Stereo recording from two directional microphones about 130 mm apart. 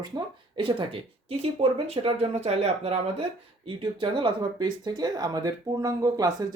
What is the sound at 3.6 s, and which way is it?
Speech, 40° right (ahead or behind).